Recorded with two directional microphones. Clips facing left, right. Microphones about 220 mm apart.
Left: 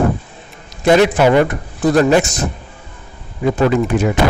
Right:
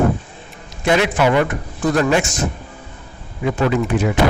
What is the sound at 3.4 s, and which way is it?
Speech, 40° left (ahead or behind).